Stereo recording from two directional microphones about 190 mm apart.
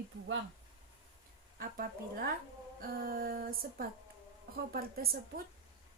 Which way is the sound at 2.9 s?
50° right (ahead or behind).